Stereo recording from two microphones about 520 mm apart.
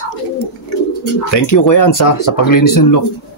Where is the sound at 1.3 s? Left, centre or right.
Left.